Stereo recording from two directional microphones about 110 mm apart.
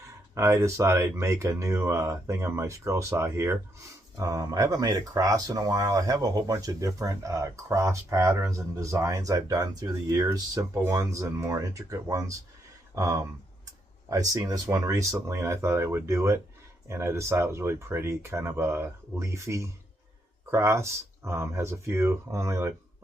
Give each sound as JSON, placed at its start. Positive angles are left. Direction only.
{"t": 0.3, "sound": "speech", "side_deg": -25}